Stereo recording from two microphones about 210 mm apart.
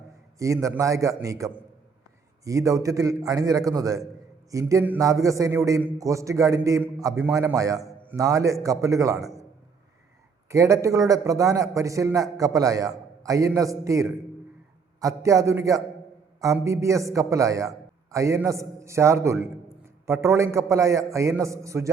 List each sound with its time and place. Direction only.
0.3 s a man's voice: 15° right (ahead or behind)
10.5 s a man's voice: 15° right (ahead or behind)